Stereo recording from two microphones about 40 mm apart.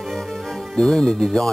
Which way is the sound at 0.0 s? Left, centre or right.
Centre.